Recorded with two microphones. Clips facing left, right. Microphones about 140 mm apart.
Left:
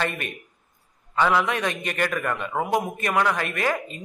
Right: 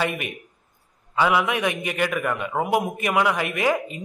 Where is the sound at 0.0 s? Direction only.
10° right (ahead or behind).